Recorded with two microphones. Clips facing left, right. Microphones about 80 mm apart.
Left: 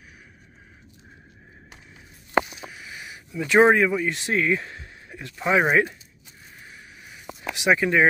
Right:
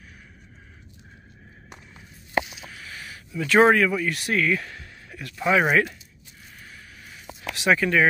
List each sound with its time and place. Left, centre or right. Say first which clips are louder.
2.6 s a sound: left 1 dB; centre
3.3 s speech: even; left
7.4 s speech: even; centre